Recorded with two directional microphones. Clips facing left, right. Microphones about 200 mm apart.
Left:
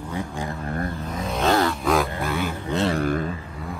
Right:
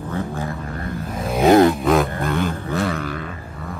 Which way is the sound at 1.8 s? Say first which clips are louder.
Right 4 dB; centre (ahead or behind).